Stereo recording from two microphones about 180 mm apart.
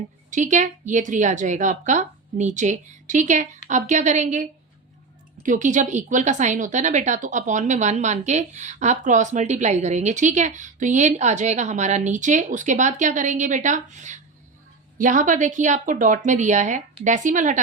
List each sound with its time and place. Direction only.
0.3 s a woman's voice: 45° right (ahead or behind)